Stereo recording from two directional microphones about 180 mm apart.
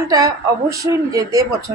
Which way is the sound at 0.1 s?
20° right (ahead or behind).